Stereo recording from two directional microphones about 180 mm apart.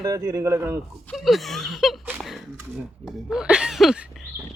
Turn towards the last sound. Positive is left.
turn(degrees=0)  # may be behind; listen again after turning